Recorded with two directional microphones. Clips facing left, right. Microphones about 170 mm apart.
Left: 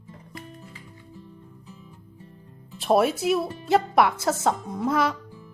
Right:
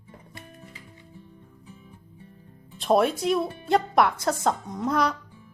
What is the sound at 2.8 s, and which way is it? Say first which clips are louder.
A woman's voice: left 1 dB; 5° left (ahead or behind).